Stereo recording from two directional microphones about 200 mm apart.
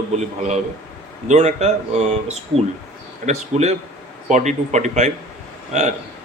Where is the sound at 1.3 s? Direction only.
35° right (ahead or behind).